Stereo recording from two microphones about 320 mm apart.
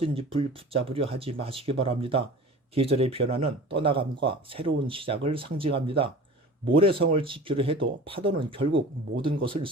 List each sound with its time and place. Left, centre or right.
0.0 s speech: centre